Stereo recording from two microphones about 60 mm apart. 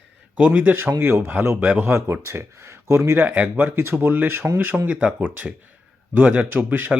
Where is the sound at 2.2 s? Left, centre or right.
Right.